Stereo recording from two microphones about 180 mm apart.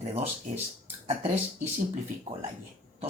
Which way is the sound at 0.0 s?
35° right (ahead or behind).